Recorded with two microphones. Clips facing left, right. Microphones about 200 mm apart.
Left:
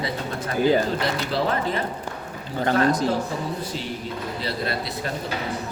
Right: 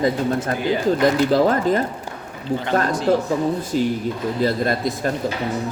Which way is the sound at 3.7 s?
50° right (ahead or behind).